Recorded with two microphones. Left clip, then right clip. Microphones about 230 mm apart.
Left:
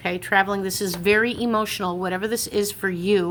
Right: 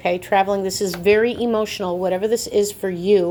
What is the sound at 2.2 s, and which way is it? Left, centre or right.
Speech, centre.